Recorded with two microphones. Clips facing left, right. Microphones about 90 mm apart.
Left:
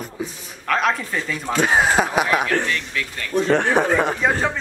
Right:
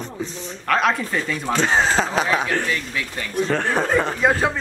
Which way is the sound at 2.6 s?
15° right (ahead or behind).